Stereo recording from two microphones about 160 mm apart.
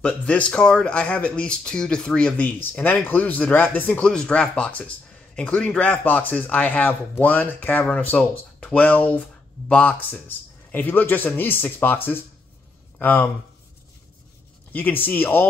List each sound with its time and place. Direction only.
0.0 s speech: 10° left (ahead or behind)
14.7 s speech: 10° left (ahead or behind)